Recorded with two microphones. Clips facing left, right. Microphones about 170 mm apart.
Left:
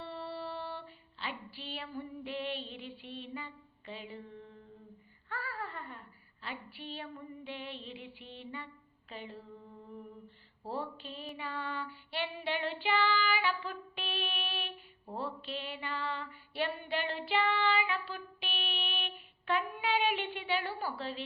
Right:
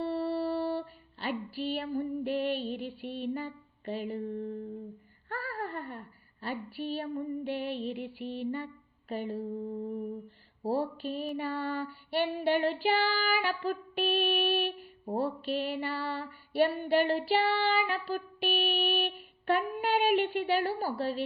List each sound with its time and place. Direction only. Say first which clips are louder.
0.0 s music: right 10 dB; 45° right (ahead or behind)
5.3 s a sound: right 5 dB; 45° right (ahead or behind)
10.6 s child singing: right 9 dB; 40° right (ahead or behind)
16.9 s music: right 8 dB; 40° right (ahead or behind)